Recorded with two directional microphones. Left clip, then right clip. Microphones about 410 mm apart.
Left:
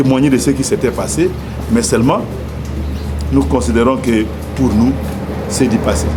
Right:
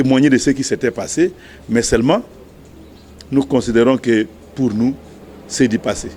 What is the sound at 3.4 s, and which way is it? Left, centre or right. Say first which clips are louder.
Speech: left 1 dB; right.